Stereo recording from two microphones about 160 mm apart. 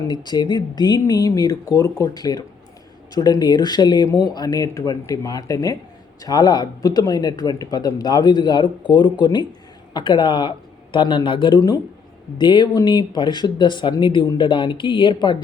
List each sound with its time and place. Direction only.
0.1 s speech: 25° left (ahead or behind)